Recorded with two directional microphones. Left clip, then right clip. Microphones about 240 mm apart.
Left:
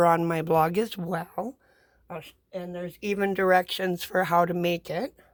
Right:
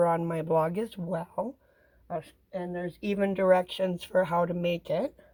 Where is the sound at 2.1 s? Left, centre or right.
Left.